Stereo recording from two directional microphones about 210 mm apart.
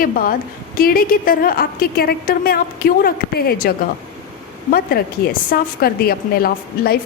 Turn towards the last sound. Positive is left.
turn(degrees=45)  # may be behind; listen again after turning